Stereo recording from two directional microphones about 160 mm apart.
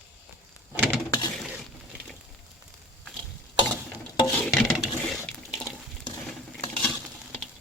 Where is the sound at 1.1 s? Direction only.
25° left (ahead or behind).